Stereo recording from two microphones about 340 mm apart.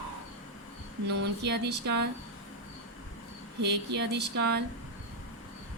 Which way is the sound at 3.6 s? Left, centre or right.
Right.